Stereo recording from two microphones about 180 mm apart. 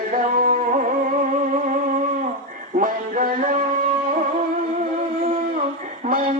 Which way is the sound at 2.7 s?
50° right (ahead or behind).